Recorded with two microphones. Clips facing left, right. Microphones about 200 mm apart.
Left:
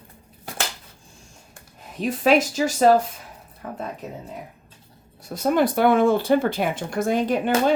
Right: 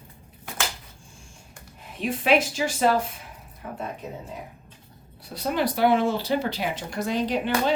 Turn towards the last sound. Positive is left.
turn(degrees=50)  # may be behind; listen again after turning